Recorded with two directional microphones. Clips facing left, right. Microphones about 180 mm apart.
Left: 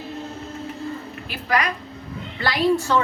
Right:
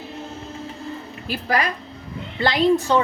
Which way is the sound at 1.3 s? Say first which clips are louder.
Right 1 dB; 35° right (ahead or behind).